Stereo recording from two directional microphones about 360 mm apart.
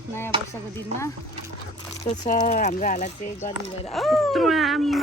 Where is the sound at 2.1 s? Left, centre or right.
Centre.